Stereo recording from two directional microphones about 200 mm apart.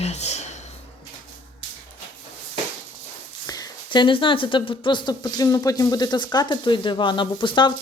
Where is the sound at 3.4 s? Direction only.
20° left (ahead or behind).